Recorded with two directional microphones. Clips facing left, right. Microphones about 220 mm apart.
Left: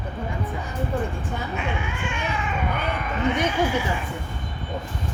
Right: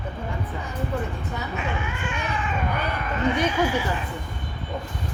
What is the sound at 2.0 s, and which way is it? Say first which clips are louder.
Cat: left 1 dB; 10° left (ahead or behind).